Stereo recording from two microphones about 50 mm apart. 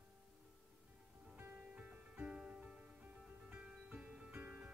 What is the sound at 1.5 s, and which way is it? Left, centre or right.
Music, right.